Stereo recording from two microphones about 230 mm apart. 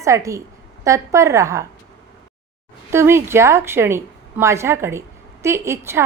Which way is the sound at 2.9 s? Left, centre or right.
Centre.